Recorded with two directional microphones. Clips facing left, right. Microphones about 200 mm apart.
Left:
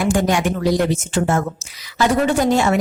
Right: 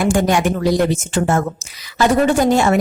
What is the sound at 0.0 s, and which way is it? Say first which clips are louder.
A woman's voice: right 2 dB; 50° right (ahead or behind).